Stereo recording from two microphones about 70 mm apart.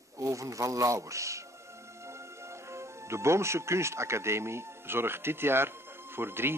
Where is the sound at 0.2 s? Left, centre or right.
Right.